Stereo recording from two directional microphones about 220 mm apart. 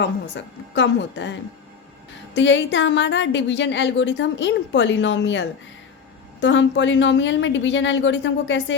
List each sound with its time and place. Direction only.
0.0 s speech: 55° left (ahead or behind)